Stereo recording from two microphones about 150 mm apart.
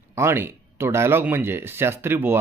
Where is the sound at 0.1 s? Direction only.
15° right (ahead or behind).